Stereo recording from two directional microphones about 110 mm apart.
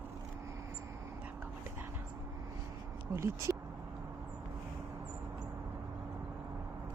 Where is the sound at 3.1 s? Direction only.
25° right (ahead or behind).